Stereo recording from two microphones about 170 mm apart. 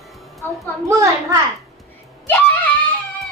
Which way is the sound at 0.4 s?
10° left (ahead or behind).